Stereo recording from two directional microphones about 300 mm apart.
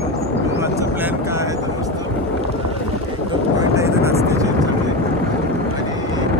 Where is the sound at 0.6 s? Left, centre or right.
Centre.